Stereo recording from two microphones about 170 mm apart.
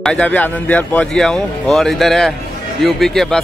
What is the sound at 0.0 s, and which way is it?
Speech, 5° left (ahead or behind).